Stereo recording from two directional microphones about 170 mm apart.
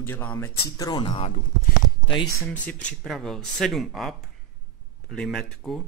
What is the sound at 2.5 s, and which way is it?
Speech, 10° left (ahead or behind).